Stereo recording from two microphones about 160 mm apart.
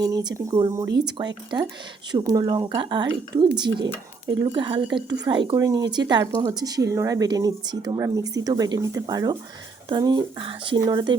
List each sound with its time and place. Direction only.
0.0 s speech: 25° right (ahead or behind)